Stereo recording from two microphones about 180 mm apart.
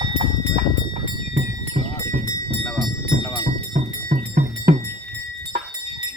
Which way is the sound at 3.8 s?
45° right (ahead or behind).